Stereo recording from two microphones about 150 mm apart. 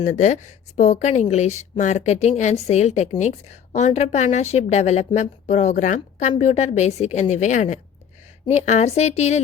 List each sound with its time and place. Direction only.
0.2 s a woman's voice: 55° left (ahead or behind)